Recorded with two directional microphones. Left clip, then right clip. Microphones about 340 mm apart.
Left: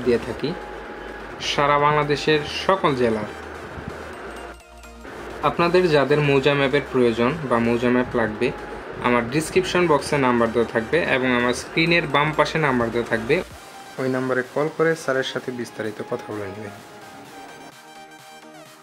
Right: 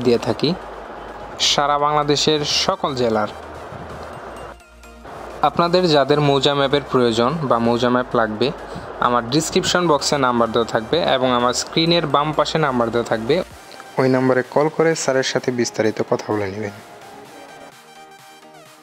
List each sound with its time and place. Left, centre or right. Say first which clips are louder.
0.0 s a man's voice: right 4 dB; right
5.4 s a man's voice: right 2 dB; right